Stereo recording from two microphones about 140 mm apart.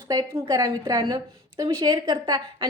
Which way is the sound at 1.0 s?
35° right (ahead or behind).